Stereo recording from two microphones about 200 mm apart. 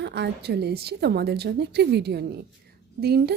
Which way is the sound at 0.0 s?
55° right (ahead or behind).